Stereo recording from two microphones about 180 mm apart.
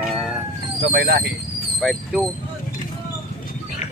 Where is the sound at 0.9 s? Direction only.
55° right (ahead or behind).